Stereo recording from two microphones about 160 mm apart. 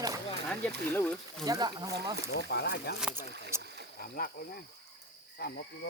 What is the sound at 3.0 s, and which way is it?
Speech, 5° right (ahead or behind).